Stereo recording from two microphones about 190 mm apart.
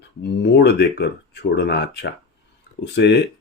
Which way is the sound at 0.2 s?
60° left (ahead or behind).